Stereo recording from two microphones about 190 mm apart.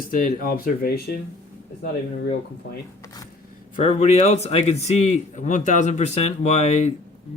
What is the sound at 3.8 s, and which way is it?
A man's voice, 35° left (ahead or behind).